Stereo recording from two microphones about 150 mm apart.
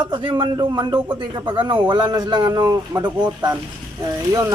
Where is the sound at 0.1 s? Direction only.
30° right (ahead or behind).